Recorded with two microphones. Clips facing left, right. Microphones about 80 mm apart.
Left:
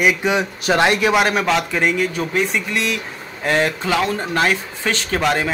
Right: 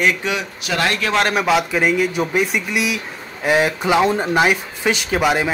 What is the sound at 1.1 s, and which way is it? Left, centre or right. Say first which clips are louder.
Speech: even; centre.